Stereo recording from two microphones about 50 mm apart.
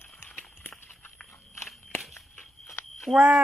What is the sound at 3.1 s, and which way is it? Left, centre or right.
Speech, centre.